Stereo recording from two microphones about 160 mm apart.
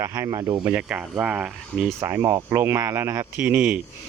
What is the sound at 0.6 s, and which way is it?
Speech, 5° right (ahead or behind).